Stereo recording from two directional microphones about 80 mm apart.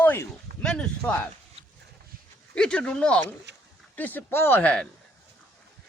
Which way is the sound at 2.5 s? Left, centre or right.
Centre.